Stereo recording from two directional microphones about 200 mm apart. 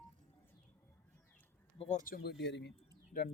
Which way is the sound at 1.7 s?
30° left (ahead or behind).